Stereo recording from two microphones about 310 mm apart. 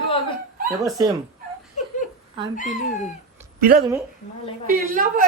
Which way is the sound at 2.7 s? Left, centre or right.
Left.